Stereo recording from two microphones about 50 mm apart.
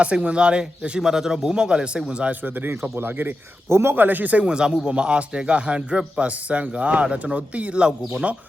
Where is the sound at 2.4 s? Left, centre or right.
Right.